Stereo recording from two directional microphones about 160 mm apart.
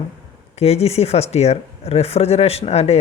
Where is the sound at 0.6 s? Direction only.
40° left (ahead or behind).